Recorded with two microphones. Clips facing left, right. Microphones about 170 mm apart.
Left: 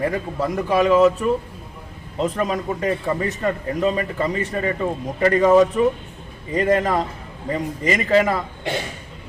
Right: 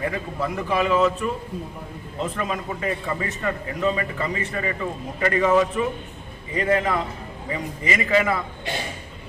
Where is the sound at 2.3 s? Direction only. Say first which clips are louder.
Left 5 dB; 40° left (ahead or behind).